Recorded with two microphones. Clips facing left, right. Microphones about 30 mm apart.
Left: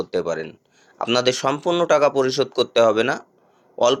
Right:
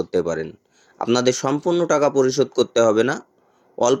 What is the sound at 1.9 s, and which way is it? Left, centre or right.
Speech, left.